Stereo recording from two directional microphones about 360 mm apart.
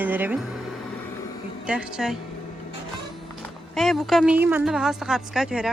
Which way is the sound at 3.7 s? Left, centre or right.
Centre.